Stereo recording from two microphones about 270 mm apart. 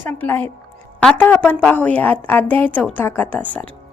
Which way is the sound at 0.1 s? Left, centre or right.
Centre.